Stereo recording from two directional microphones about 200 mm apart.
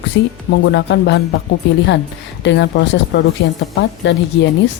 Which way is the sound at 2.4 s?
65° left (ahead or behind).